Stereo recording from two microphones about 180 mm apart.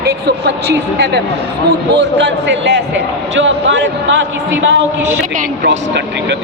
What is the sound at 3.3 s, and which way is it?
Speech, 85° right.